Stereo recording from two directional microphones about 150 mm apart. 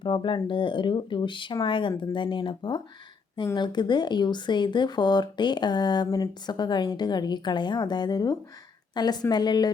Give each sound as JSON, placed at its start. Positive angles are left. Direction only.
{"t": 0.0, "sound": "a woman's voice", "side_deg": 30}